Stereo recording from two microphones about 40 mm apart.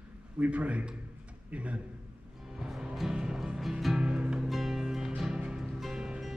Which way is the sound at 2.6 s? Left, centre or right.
Centre.